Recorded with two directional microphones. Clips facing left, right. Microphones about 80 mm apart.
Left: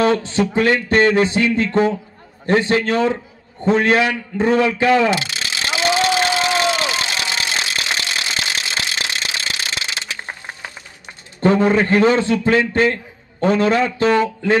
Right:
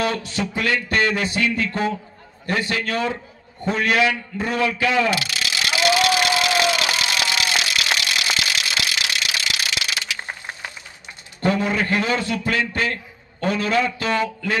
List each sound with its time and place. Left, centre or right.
0.0 s a man's voice: left
3.7 s a sound: left
11.4 s a man's voice: left